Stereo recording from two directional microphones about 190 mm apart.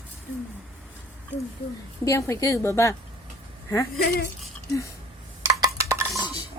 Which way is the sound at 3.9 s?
55° left (ahead or behind).